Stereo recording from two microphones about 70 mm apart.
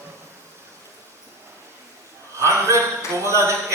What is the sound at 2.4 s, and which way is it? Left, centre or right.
Speech, right.